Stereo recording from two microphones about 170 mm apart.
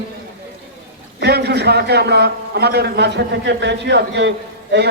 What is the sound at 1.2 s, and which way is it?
A man's voice, 70° right (ahead or behind).